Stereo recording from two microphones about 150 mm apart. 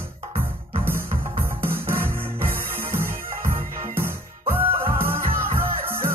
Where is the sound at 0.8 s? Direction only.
15° right (ahead or behind).